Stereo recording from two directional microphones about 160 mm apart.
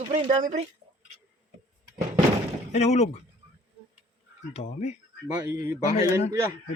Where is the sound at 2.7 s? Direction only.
45° left (ahead or behind).